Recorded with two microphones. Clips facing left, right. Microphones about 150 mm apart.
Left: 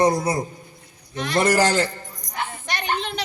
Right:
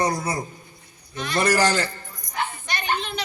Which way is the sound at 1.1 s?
75° left (ahead or behind).